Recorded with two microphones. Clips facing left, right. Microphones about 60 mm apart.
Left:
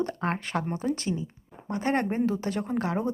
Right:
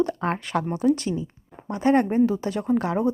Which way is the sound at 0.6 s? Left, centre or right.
Left.